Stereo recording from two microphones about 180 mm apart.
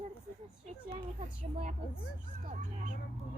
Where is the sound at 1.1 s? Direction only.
40° right (ahead or behind).